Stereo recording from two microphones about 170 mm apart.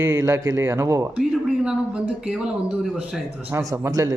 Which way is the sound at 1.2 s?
5° right (ahead or behind).